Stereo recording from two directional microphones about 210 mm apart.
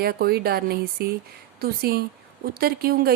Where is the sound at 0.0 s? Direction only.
45° right (ahead or behind).